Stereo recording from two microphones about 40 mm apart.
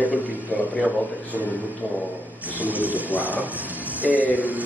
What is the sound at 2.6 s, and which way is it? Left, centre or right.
A man's voice, right.